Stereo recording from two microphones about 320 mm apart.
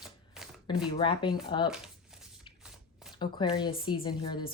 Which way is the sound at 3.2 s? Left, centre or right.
Centre.